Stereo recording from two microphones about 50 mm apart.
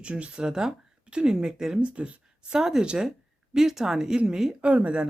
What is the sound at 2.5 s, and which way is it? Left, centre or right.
Speech, centre.